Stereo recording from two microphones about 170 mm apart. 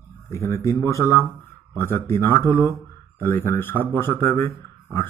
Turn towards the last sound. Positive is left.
turn(degrees=15)  # may be behind; listen again after turning